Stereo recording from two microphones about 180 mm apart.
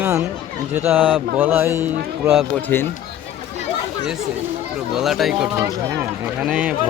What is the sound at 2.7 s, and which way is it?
Speech, 10° left (ahead or behind).